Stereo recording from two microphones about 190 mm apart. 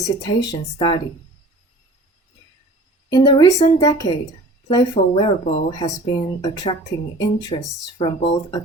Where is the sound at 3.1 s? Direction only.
20° left (ahead or behind).